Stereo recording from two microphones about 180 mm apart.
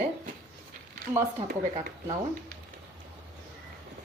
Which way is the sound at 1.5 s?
45° right (ahead or behind).